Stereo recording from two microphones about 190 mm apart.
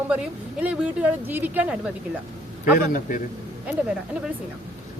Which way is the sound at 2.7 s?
45° left (ahead or behind).